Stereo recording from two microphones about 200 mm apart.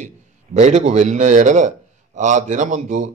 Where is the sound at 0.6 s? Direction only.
35° right (ahead or behind).